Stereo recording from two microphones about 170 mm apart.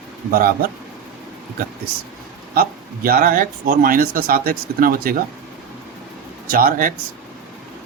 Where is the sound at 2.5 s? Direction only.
60° right (ahead or behind).